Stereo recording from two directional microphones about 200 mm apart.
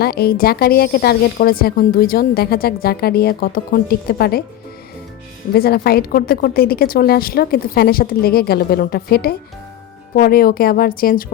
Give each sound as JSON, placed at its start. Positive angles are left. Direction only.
{"t": 0.0, "sound": "a woman's voice", "side_deg": 50}
{"t": 5.5, "sound": "a woman's voice", "side_deg": 50}